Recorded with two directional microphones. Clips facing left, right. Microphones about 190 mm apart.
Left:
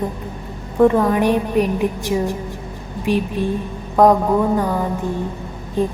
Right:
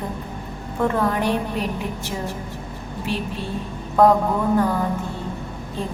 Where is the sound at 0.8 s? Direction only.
15° left (ahead or behind).